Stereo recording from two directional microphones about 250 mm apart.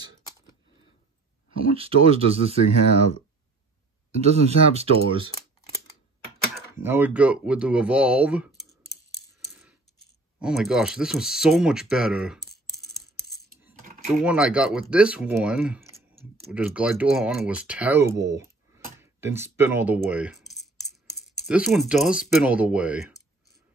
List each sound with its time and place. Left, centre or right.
1.5 s speech: right
4.2 s speech: right
6.8 s speech: centre
9.4 s coin: centre
10.4 s speech: centre
13.7 s typing: right
14.2 s speech: centre
21.5 s speech: centre